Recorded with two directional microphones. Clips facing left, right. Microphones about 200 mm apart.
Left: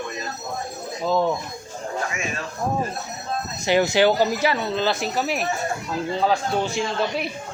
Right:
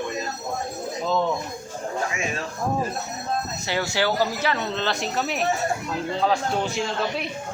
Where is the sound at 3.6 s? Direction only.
15° left (ahead or behind); by 7.3 s centre (ahead or behind).